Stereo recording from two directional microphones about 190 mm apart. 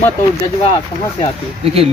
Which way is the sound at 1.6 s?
30° right (ahead or behind).